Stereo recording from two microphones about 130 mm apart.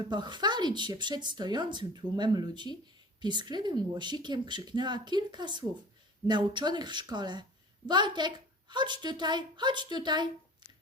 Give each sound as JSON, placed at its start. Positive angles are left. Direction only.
{"t": 0.1, "sound": "speech", "side_deg": -35}